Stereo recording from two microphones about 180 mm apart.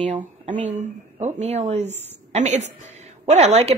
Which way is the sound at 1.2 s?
35° right (ahead or behind).